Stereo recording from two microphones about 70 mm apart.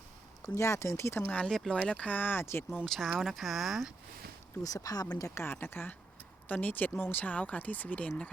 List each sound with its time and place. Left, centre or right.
0.4 s speech: left
1.5 s speech: centre; by 2.6 s left
2.8 s speech: centre
4.6 s speech: left
5.4 s speech: left